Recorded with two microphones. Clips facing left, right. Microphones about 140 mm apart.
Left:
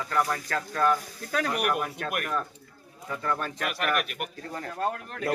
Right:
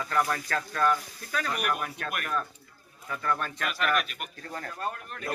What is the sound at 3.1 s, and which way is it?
Speech, 20° left (ahead or behind).